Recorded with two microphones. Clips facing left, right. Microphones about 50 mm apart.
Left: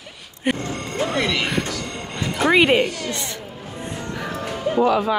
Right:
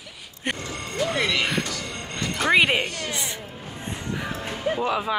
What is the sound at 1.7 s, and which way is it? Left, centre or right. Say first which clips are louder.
Music: left 3 dB; centre.